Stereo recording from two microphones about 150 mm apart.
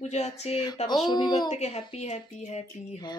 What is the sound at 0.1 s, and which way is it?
A woman's voice, 45° left (ahead or behind).